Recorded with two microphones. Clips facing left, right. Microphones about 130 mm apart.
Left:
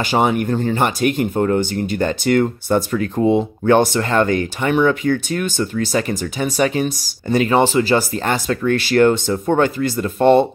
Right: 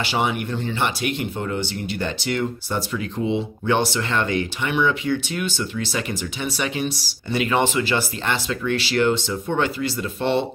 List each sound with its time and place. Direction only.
0.0 s speech: 45° left (ahead or behind)